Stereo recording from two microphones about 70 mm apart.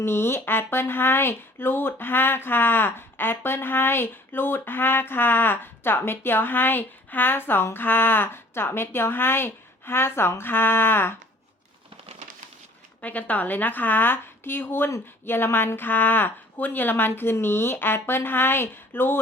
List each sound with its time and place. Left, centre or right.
0.0 s speech: left
13.0 s a woman's voice: left